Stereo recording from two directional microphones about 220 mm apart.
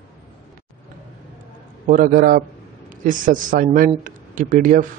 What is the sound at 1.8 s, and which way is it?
A man's voice, 40° right (ahead or behind).